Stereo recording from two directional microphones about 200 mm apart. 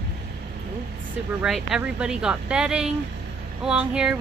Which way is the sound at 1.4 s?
5° right (ahead or behind).